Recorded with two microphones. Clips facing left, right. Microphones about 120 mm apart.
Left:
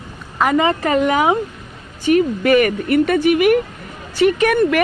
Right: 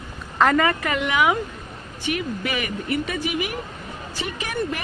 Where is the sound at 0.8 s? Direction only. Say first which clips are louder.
Left 6 dB; 40° left (ahead or behind).